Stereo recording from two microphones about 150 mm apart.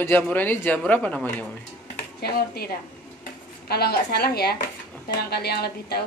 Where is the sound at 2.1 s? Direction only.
90° left.